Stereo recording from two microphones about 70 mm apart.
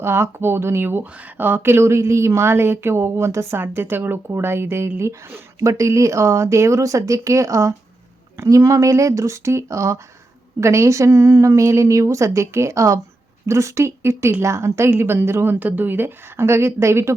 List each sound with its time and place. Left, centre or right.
0.0 s speech: right